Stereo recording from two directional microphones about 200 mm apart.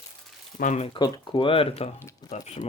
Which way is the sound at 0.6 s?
35° left (ahead or behind).